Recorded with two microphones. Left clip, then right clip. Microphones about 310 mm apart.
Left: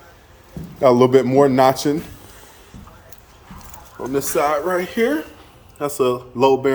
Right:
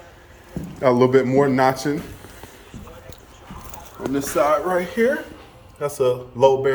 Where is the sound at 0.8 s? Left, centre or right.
Centre.